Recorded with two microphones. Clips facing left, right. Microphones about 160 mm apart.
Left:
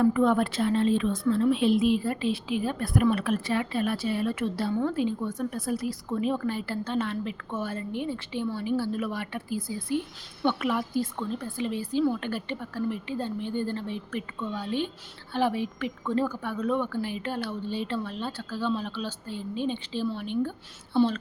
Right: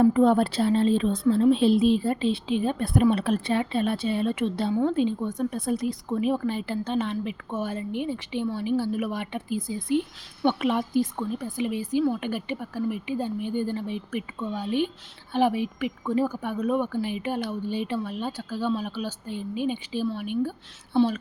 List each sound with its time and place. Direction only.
0.0 s a woman's voice: 30° right (ahead or behind); by 21.2 s 5° right (ahead or behind)